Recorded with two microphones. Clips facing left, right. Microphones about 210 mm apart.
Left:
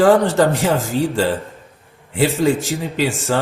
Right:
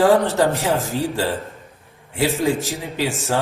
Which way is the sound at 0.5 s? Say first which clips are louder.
Left 3 dB; 80° left.